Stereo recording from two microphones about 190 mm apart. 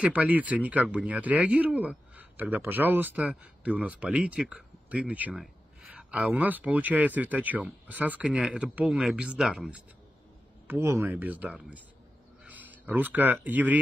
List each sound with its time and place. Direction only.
0.0 s speech: 5° right (ahead or behind)